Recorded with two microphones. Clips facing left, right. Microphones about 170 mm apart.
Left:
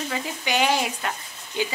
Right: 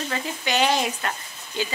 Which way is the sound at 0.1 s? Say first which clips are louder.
Right 1 dB; 10° left (ahead or behind).